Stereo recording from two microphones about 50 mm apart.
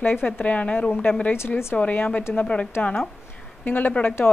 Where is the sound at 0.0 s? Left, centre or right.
Left.